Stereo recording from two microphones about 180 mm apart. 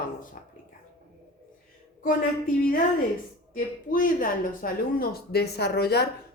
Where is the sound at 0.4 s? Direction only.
50° left (ahead or behind).